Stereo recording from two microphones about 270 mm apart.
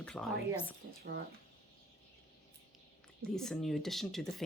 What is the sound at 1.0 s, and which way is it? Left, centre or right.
Speech, right.